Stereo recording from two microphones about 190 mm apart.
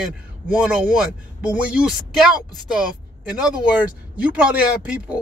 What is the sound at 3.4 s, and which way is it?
Speech, 5° right (ahead or behind).